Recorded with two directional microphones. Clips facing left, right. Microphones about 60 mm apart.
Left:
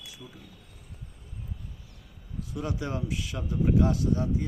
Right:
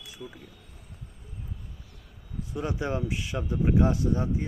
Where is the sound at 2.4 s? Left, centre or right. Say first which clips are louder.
Right 2 dB; right.